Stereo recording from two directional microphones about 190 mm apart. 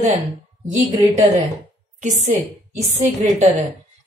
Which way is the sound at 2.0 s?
40° right (ahead or behind).